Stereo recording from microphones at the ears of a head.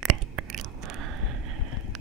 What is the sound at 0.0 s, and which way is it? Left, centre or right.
Chewing, right.